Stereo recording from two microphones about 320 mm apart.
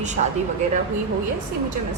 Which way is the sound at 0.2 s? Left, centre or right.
Right.